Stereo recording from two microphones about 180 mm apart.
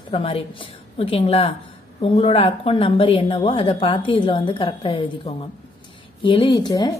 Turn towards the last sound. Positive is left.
turn(degrees=20)  # may be behind; listen again after turning